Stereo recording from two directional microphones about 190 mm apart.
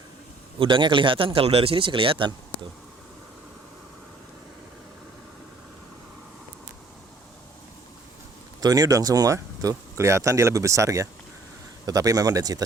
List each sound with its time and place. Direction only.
0.6 s a man's voice: 25° right (ahead or behind)
8.6 s a man's voice: 20° right (ahead or behind)